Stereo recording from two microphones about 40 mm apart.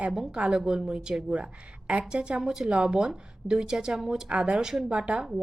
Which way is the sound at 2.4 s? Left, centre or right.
Centre.